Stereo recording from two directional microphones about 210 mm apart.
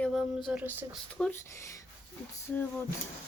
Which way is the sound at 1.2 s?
10° left (ahead or behind).